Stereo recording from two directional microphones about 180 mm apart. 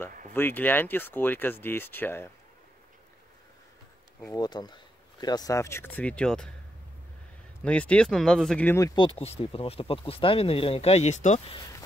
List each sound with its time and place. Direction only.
0.3 s speech: 10° left (ahead or behind)
4.2 s speech: 20° left (ahead or behind); by 6.5 s 5° left (ahead or behind)
7.6 s speech: 5° left (ahead or behind); by 11.5 s 40° left (ahead or behind)
11.5 s speech: 20° left (ahead or behind)